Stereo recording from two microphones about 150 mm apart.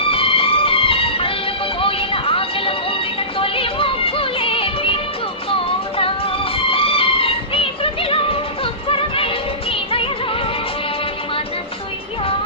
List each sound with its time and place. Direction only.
0.0 s music: 40° left (ahead or behind)
6.0 s music: 40° left (ahead or behind)